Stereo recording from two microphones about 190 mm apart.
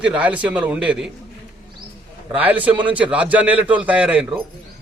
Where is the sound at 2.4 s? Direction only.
10° right (ahead or behind).